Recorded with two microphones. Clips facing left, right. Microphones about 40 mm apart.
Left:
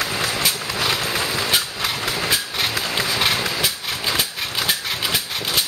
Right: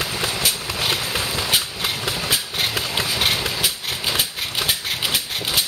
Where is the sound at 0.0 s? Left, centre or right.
Left.